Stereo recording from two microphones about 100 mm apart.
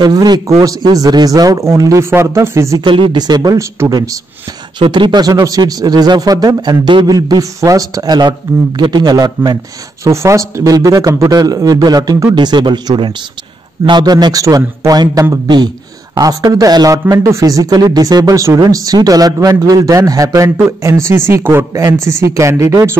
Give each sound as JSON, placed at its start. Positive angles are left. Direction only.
{"t": 0.0, "sound": "speech", "side_deg": -45}
{"t": 2.8, "sound": "speech", "side_deg": -55}
{"t": 3.5, "sound": "speech", "side_deg": -35}
{"t": 4.7, "sound": "speech", "side_deg": -55}
{"t": 10.0, "sound": "speech", "side_deg": -30}
{"t": 16.2, "sound": "speech", "side_deg": -35}